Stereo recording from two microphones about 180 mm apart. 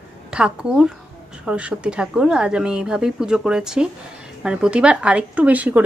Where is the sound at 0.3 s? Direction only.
5° right (ahead or behind).